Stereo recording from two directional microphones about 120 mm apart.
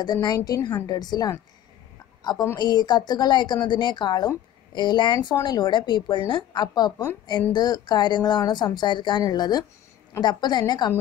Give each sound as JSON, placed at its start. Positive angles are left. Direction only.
{"t": 0.0, "sound": "a woman's voice", "side_deg": 35}
{"t": 2.5, "sound": "a woman's voice", "side_deg": 35}